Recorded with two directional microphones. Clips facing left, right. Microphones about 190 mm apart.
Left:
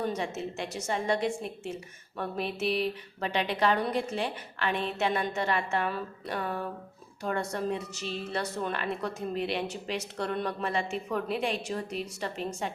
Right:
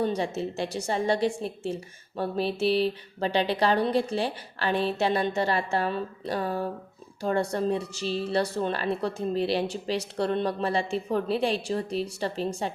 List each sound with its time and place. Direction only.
0.0 s a woman's voice: 35° right (ahead or behind)